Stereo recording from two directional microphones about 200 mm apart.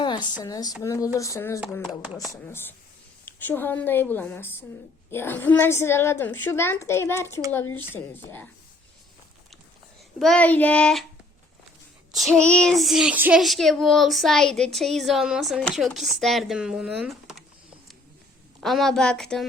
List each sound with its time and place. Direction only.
0.0 s a woman's voice: 20° left (ahead or behind)
1.9 s child singing: centre (ahead or behind)
2.3 s a woman's voice: 10° left (ahead or behind)
10.2 s child singing: 5° left (ahead or behind)
12.1 s child singing: centre (ahead or behind)
18.6 s child singing: centre (ahead or behind)